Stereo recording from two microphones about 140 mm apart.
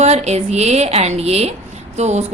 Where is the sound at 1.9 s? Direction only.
55° right (ahead or behind).